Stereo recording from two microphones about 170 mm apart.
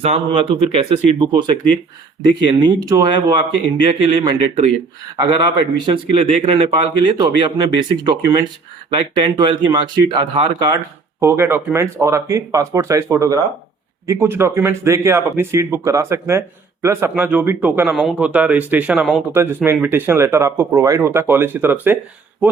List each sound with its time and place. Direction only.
0.0 s a man's voice: 35° right (ahead or behind)
11.2 s speech: 15° right (ahead or behind)